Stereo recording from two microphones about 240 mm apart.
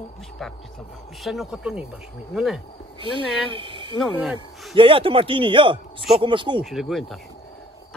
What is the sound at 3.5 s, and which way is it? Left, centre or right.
Speech, right.